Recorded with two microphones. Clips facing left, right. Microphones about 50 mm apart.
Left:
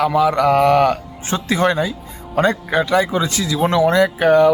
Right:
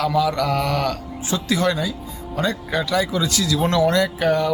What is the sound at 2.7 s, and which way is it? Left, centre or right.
Speech, left.